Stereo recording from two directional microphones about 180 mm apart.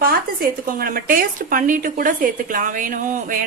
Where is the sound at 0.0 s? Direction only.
55° right (ahead or behind).